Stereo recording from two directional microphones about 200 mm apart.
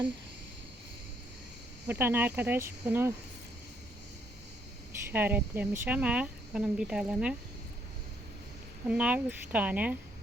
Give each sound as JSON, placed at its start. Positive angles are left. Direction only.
{"t": 1.9, "sound": "speech", "side_deg": -10}
{"t": 5.1, "sound": "speech", "side_deg": -10}
{"t": 8.9, "sound": "speech", "side_deg": -5}